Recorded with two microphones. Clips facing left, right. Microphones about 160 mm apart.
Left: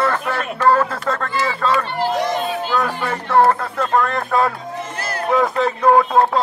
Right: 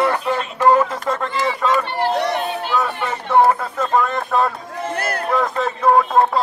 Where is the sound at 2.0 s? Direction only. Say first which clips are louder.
Left 1 dB; 60° right (ahead or behind).